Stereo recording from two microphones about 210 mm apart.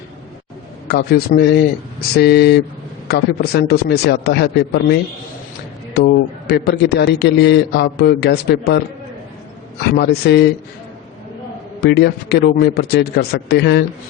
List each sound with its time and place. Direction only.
0.9 s a man's voice: 50° left (ahead or behind)
10.0 s a man's voice: 55° left (ahead or behind)
11.8 s a man's voice: 50° left (ahead or behind)